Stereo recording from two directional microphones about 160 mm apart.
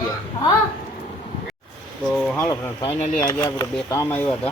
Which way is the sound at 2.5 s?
20° left (ahead or behind).